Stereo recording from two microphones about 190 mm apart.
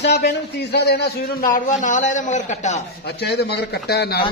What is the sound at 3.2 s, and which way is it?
A man's voice, 60° left (ahead or behind).